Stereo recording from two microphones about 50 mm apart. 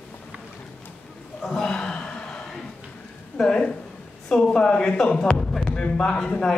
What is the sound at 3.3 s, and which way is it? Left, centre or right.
A man's voice, centre.